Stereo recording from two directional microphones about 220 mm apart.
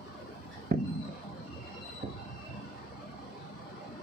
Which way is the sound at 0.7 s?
40° right (ahead or behind).